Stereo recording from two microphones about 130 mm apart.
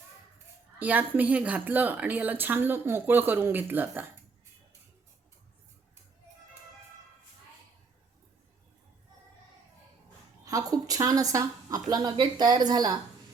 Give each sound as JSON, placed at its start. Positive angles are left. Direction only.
{"t": 0.8, "sound": "a woman's voice", "side_deg": -10}
{"t": 10.4, "sound": "a woman's voice", "side_deg": -25}